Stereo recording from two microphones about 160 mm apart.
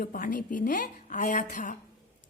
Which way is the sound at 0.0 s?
60° left (ahead or behind).